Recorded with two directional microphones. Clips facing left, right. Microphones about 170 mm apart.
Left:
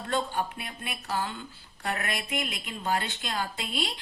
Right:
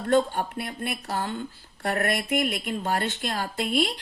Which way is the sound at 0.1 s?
55° right (ahead or behind).